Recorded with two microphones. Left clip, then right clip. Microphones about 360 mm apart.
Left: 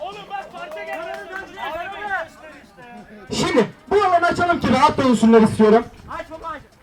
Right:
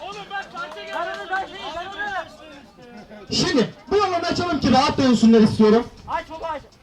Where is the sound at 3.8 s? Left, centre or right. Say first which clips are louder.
Left 6 dB; centre.